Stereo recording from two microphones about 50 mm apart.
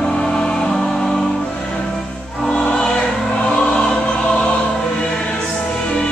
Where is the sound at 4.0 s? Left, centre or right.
Left.